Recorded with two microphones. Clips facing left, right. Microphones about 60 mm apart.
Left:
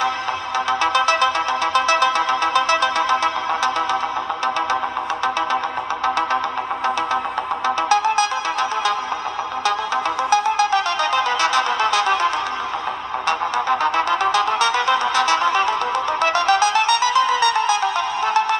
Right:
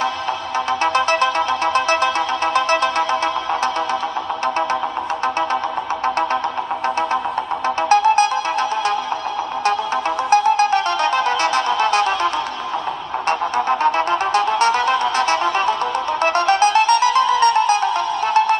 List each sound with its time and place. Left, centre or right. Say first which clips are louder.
0.9 s music: right 1 dB; right
7.6 s music: right 3 dB; right
10.3 s music: right 3 dB; right
13.3 s music: right 1 dB; right